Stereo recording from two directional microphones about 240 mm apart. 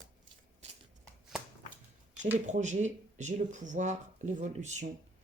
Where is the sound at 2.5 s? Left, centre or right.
Right.